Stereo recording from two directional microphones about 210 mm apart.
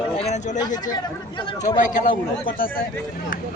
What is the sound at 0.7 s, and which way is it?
Speech, 20° left (ahead or behind).